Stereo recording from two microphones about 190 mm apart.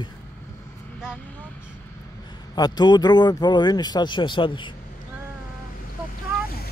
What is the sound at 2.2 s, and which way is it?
A man's voice, 20° left (ahead or behind).